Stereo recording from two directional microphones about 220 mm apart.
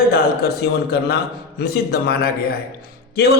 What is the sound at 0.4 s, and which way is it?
A man's voice, 45° left (ahead or behind).